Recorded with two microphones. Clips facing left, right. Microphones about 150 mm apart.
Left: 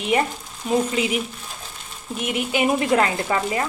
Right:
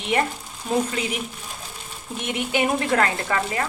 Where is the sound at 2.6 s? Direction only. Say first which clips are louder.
Left 3 dB; 15° left (ahead or behind).